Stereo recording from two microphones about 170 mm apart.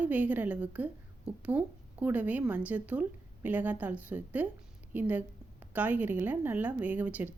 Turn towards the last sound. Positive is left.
turn(degrees=-10)  # may be behind; listen again after turning